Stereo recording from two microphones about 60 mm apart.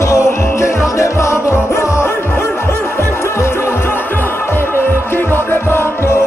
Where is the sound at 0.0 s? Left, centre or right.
Left.